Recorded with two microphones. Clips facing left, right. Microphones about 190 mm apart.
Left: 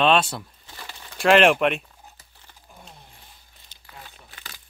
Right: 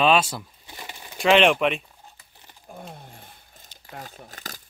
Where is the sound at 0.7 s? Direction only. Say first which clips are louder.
Right 3 dB; 15° right (ahead or behind).